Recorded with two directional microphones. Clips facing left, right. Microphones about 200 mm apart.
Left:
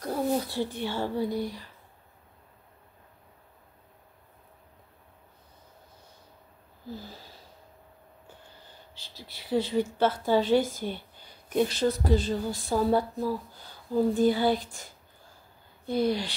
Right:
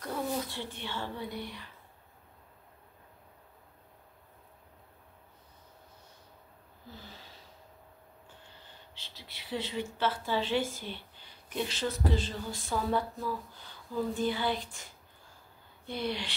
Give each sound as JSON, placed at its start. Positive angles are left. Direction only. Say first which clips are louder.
{"t": 0.0, "sound": "speech", "louder": "left 6 dB", "side_deg": 35}
{"t": 9.0, "sound": "speech", "louder": "left 6 dB", "side_deg": 40}
{"t": 15.9, "sound": "speech", "louder": "left 8 dB", "side_deg": 40}